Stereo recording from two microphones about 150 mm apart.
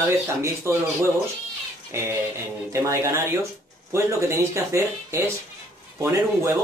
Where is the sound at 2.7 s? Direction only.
20° right (ahead or behind).